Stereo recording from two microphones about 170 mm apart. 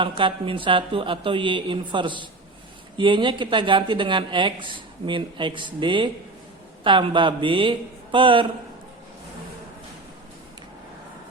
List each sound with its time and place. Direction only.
0.0 s speech: 30° right (ahead or behind)